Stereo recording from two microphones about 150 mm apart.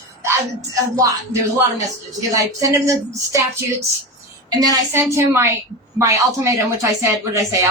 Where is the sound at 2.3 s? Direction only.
20° right (ahead or behind).